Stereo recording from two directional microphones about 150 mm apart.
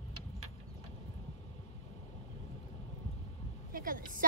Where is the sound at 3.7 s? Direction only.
70° right (ahead or behind).